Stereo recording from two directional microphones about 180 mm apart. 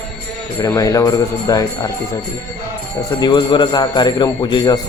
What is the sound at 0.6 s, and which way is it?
A man's voice, 20° left (ahead or behind).